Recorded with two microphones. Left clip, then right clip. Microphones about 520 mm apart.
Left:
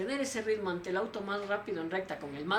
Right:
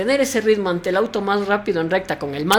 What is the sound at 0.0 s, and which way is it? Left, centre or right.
Speech, right.